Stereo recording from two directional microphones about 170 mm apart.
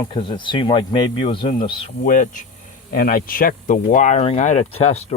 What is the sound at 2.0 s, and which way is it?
Speech, 50° left (ahead or behind).